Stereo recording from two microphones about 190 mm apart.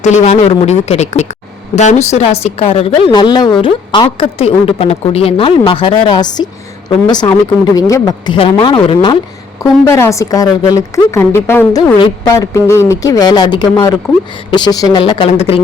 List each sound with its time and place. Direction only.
0.0 s a woman's voice: 35° left (ahead or behind)
9.8 s a woman's voice: 15° left (ahead or behind)